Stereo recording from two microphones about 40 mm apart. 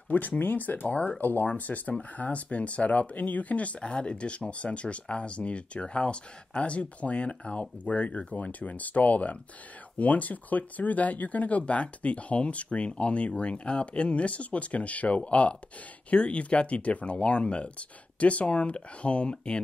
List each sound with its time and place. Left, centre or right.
0.4 s speech: left